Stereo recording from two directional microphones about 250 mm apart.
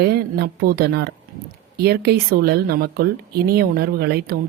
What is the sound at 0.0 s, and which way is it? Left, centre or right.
Speech, right.